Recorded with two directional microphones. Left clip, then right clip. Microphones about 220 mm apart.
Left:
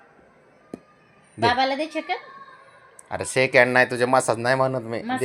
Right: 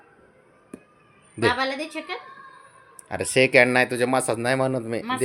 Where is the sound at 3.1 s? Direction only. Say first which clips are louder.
Right 2 dB; 30° right (ahead or behind).